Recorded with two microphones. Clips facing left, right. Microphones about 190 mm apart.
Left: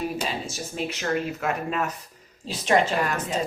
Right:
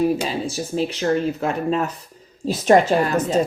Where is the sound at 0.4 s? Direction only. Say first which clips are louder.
Right 8 dB; 35° right (ahead or behind).